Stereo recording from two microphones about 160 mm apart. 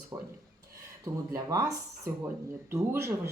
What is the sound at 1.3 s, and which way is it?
Music, 20° right (ahead or behind).